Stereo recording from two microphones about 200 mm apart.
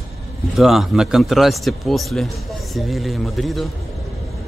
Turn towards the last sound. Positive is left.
turn(degrees=0)  # may be behind; listen again after turning